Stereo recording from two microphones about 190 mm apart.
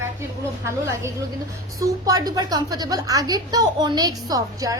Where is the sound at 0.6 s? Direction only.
15° right (ahead or behind).